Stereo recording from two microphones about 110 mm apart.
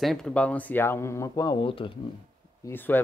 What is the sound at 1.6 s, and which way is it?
Speech, 55° left (ahead or behind).